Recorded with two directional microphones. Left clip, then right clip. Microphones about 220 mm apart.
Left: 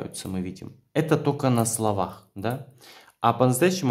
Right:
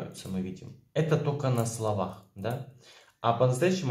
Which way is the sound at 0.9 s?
45° left (ahead or behind).